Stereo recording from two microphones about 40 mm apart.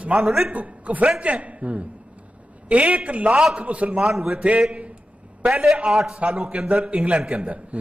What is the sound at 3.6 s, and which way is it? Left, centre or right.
A man's voice, right.